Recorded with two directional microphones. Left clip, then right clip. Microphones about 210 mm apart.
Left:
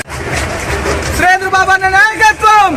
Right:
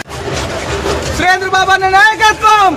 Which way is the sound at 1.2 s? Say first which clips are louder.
Left 2 dB; 25° left (ahead or behind).